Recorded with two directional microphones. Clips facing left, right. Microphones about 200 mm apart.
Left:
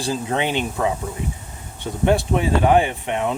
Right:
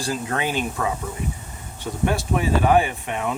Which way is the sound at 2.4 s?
20° left (ahead or behind).